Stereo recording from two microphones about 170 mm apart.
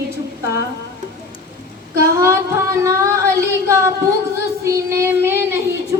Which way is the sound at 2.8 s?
15° right (ahead or behind).